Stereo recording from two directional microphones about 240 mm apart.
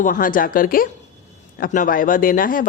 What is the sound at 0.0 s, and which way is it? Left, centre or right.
A woman's voice, left.